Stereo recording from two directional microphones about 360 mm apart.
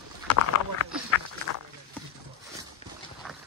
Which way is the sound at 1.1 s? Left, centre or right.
Left.